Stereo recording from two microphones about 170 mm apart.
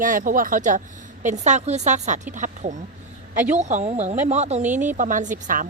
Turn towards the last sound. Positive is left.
turn(degrees=-50)  # may be behind; listen again after turning